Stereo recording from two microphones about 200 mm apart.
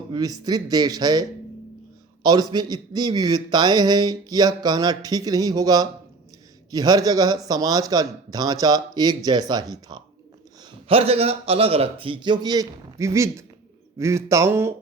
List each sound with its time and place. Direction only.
0.1 s a man's voice: 20° right (ahead or behind)